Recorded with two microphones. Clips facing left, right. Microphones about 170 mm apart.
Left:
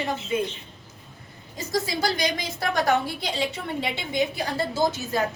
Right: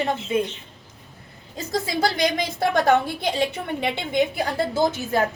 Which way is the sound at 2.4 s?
55° right (ahead or behind).